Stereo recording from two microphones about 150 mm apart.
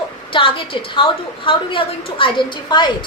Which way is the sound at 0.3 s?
35° left (ahead or behind).